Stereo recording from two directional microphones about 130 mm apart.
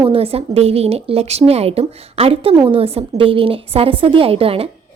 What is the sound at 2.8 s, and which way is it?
A woman's voice, 45° right (ahead or behind).